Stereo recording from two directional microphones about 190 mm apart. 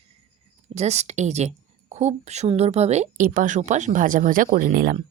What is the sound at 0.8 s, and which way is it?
A woman's voice, 35° right (ahead or behind).